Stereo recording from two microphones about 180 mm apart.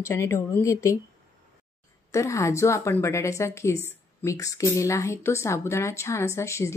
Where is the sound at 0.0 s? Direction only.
15° left (ahead or behind).